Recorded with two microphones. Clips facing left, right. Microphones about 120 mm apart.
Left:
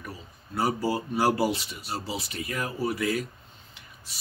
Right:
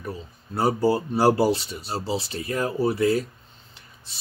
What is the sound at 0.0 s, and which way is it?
Speech, 30° right (ahead or behind).